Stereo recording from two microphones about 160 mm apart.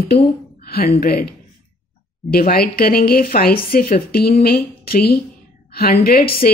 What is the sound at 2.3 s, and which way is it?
Speech, 70° left (ahead or behind).